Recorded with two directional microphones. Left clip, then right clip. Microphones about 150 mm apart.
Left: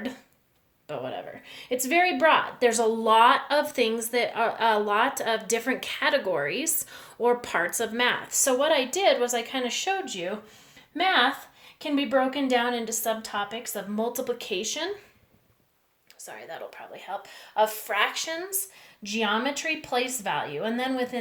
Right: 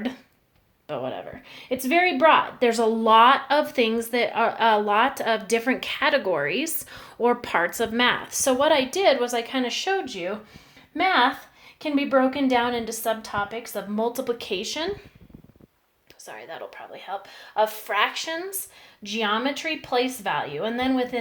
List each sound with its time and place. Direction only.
0.9 s a woman's voice: 40° right (ahead or behind)
16.2 s a woman's voice: 35° right (ahead or behind)